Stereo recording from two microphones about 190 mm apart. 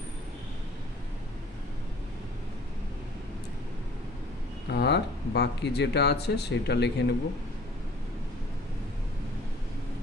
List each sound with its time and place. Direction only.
4.7 s speech: 60° left (ahead or behind)